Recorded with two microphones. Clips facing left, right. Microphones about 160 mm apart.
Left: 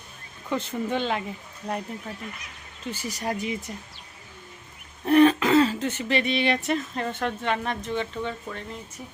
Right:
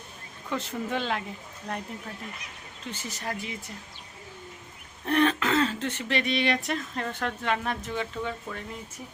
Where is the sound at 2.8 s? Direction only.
10° left (ahead or behind).